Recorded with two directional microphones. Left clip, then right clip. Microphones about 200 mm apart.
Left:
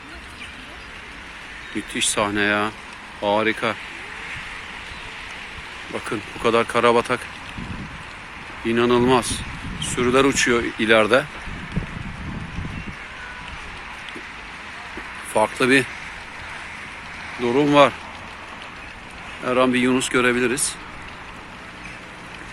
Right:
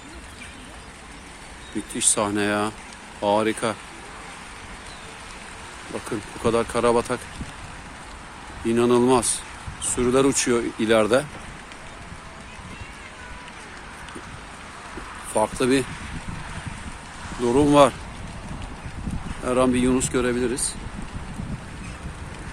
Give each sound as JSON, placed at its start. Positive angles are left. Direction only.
{"t": 2.0, "sound": "speech", "side_deg": -10}
{"t": 6.1, "sound": "speech", "side_deg": -5}
{"t": 8.6, "sound": "speech", "side_deg": -10}
{"t": 15.3, "sound": "speech", "side_deg": -5}
{"t": 17.4, "sound": "speech", "side_deg": -15}
{"t": 19.5, "sound": "speech", "side_deg": -10}